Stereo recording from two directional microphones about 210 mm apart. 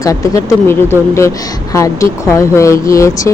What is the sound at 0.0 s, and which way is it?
Speech, 15° left (ahead or behind).